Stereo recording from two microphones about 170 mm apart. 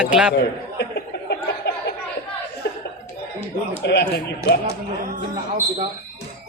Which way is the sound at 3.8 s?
75° left (ahead or behind).